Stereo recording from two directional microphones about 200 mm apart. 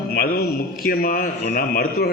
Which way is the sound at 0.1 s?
50° left (ahead or behind).